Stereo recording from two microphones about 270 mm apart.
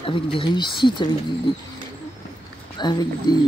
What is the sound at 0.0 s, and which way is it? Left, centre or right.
Speech, centre.